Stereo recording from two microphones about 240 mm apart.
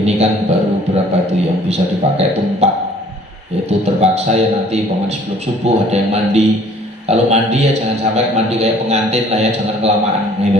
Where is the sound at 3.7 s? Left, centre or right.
Right.